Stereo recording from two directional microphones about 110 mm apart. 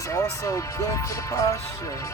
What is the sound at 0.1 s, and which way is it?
Speech, 30° left (ahead or behind).